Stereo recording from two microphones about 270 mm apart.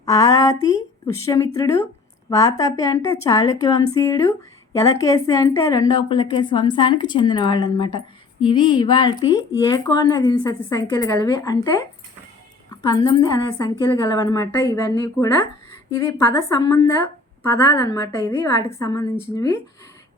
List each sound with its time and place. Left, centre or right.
0.0 s a woman's voice: centre
12.9 s a woman's voice: centre